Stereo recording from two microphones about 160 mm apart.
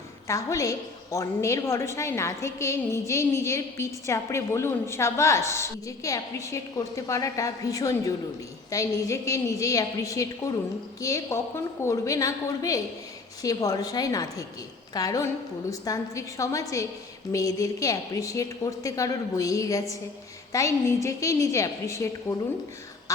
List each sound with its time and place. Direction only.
0.3 s a woman's voice: 20° left (ahead or behind)